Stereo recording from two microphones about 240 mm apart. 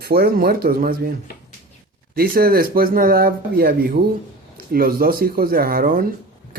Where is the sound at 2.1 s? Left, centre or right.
Right.